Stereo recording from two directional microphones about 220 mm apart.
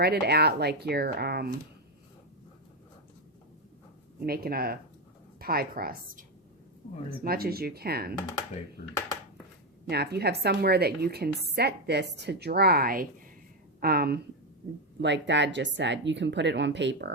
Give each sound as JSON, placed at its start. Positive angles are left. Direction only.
{"t": 0.0, "sound": "a woman's voice", "side_deg": -45}
{"t": 4.3, "sound": "a woman's voice", "side_deg": -45}
{"t": 9.9, "sound": "a woman's voice", "side_deg": -45}